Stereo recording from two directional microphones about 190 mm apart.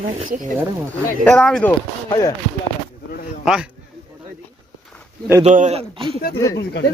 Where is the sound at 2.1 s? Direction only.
20° left (ahead or behind).